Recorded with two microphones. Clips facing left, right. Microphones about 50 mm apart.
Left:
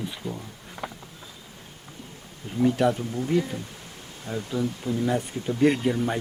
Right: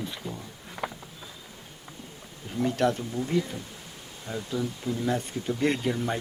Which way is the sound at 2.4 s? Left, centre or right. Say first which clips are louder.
Left 3 dB; centre.